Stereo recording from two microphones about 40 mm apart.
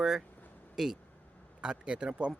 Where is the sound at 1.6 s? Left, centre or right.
Right.